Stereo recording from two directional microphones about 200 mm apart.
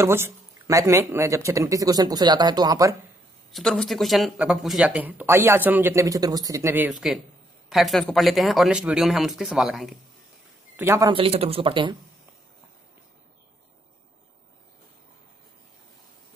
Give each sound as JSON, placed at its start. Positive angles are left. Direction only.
{"t": 0.0, "sound": "speech", "side_deg": -15}
{"t": 3.5, "sound": "speech", "side_deg": 0}
{"t": 10.8, "sound": "speech", "side_deg": -15}